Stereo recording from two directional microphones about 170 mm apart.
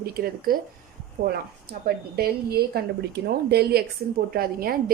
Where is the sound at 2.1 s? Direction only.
65° right (ahead or behind).